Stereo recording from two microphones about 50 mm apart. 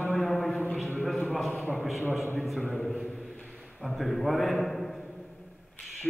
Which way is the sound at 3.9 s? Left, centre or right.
Centre.